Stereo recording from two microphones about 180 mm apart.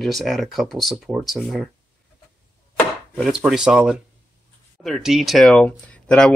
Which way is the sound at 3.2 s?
5° right (ahead or behind).